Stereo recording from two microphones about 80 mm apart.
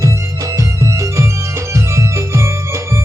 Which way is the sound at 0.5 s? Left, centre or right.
Right.